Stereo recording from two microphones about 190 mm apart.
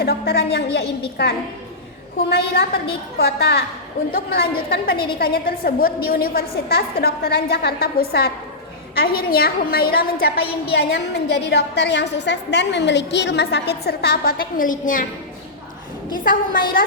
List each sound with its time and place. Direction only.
0.0 s a woman's voice: 55° left (ahead or behind)
16.1 s a woman's voice: 45° left (ahead or behind)